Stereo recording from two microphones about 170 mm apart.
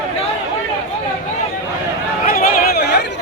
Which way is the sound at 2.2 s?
55° left (ahead or behind).